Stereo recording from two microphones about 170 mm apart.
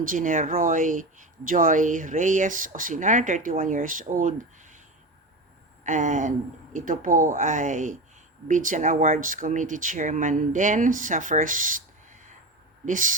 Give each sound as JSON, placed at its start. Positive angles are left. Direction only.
{"t": 0.1, "sound": "speech", "side_deg": -50}
{"t": 5.8, "sound": "speech", "side_deg": -45}